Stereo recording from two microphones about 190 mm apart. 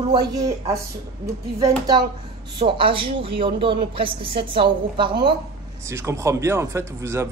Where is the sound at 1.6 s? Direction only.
20° right (ahead or behind).